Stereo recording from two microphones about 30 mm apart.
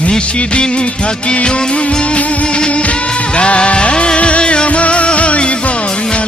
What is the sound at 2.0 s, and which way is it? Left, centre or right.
Music, left.